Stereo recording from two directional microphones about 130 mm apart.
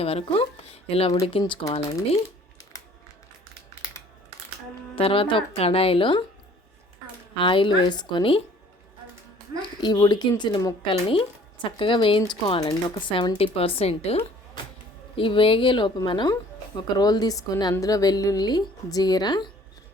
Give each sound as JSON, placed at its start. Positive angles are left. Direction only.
{"t": 0.0, "sound": "speech", "side_deg": 50}
{"t": 4.9, "sound": "speech", "side_deg": 45}
{"t": 7.3, "sound": "a woman's voice", "side_deg": 40}
{"t": 9.6, "sound": "a woman's voice", "side_deg": 35}
{"t": 10.8, "sound": "speech", "side_deg": 45}
{"t": 12.5, "sound": "a woman's voice", "side_deg": 30}